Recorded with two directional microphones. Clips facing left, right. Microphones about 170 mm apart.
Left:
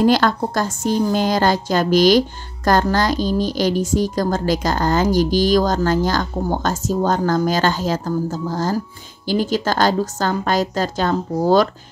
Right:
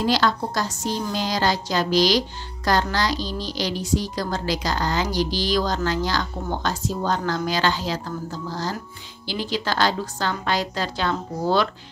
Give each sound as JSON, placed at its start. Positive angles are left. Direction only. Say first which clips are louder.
{"t": 0.0, "sound": "a woman's voice", "louder": "left 6 dB", "side_deg": 50}